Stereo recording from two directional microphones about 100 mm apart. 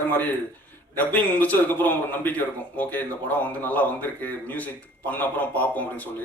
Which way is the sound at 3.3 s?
15° left (ahead or behind).